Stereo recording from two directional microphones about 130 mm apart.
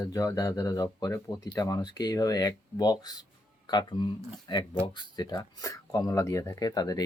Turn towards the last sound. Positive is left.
turn(degrees=30)  # may be behind; listen again after turning